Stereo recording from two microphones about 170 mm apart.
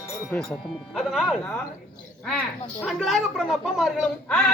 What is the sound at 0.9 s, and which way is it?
Speech, centre (ahead or behind).